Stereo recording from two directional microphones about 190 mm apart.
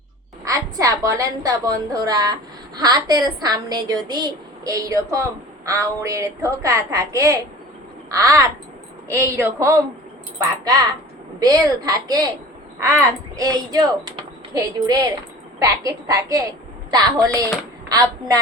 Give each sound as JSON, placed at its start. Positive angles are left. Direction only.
{"t": 0.4, "sound": "a woman's voice", "side_deg": -15}